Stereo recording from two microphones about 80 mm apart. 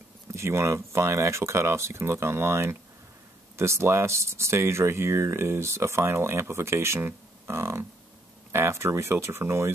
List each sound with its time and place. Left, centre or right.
0.3 s speech: right